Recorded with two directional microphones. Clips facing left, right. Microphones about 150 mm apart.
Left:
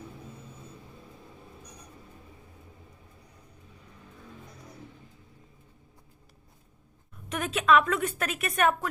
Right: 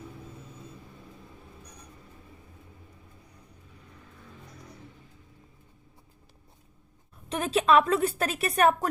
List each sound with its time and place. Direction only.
7.3 s a woman's voice: 30° right (ahead or behind)